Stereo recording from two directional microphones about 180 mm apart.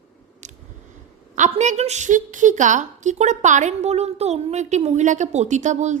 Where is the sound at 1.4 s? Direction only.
40° right (ahead or behind).